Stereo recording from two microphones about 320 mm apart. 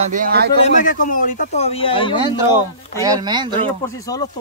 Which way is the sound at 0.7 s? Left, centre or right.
Left.